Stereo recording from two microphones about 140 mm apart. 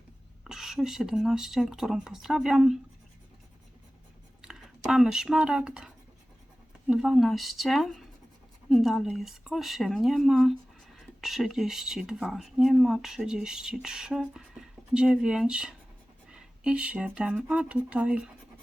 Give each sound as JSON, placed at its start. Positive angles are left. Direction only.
{"t": 0.4, "sound": "speech", "side_deg": -5}
{"t": 4.9, "sound": "speech", "side_deg": -5}